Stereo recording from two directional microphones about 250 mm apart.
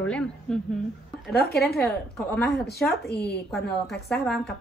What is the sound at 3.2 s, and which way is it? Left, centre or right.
Speech, left.